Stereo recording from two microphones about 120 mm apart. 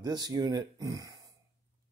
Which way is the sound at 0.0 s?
35° right (ahead or behind).